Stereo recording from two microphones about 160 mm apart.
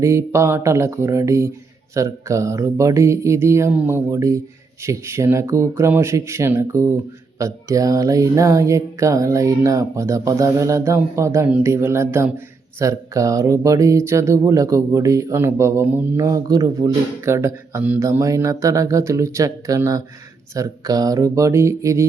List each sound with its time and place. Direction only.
0.0 s speech: 15° right (ahead or behind)